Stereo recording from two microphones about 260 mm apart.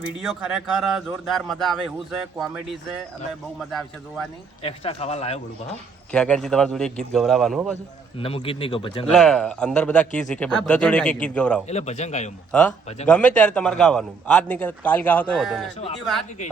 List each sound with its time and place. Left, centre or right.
0.2 s a man's voice: centre
4.6 s speech: left
6.1 s a man's voice: centre
8.2 s speech: left
9.1 s a man's voice: centre
11.7 s speech: left
12.5 s a man's voice: centre